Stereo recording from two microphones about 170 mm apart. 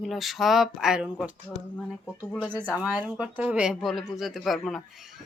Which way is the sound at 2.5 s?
10° right (ahead or behind).